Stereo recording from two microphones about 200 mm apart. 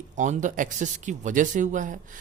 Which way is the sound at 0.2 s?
40° right (ahead or behind).